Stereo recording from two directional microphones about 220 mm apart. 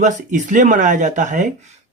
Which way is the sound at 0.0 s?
35° right (ahead or behind).